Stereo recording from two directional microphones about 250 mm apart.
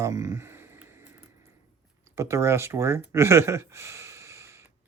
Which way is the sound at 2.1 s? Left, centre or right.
Centre.